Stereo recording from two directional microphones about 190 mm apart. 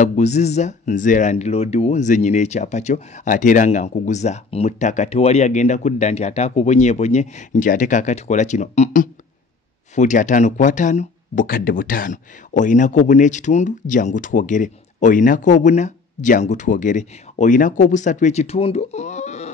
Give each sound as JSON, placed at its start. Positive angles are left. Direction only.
{"t": 0.0, "sound": "speech", "side_deg": 40}